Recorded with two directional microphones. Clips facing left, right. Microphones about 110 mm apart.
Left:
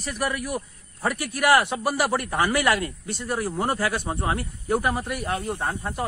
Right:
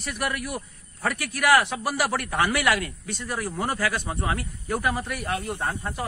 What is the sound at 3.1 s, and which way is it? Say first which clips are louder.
Speech: left 3 dB; 50° left (ahead or behind).